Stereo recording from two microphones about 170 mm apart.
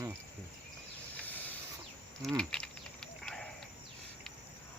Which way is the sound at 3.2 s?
5° left (ahead or behind).